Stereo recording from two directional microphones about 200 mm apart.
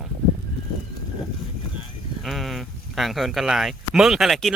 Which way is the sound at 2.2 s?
Centre (ahead or behind).